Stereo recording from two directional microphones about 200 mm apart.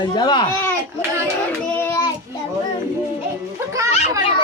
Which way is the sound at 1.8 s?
15° left (ahead or behind).